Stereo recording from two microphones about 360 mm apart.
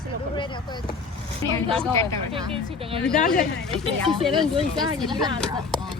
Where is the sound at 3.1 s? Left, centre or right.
Left.